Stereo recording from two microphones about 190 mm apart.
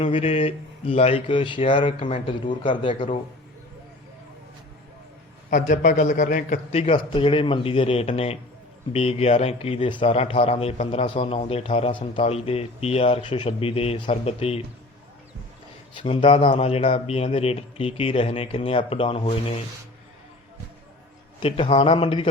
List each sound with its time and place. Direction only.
0.0 s speech: 30° left (ahead or behind)
5.5 s a man's voice: 40° left (ahead or behind)
6.7 s speech: 30° left (ahead or behind)
16.0 s speech: 25° left (ahead or behind)
21.4 s speech: 30° left (ahead or behind)